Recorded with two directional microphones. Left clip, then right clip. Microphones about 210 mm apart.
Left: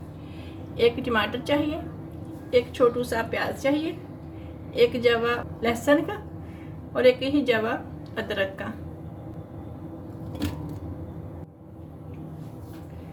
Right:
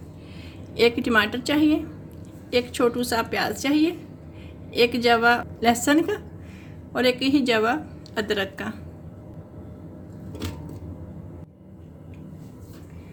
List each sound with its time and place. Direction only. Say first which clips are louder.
0.8 s a woman's voice: right 3 dB; 50° right (ahead or behind)